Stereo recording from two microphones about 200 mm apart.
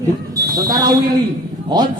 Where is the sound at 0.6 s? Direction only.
20° right (ahead or behind).